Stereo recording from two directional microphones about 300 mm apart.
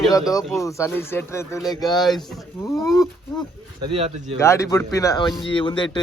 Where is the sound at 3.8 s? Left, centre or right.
Centre.